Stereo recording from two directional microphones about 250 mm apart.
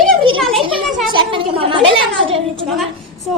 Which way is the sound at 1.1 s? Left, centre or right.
Centre.